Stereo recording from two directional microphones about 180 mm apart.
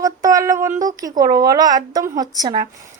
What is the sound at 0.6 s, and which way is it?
A woman's voice, 20° right (ahead or behind).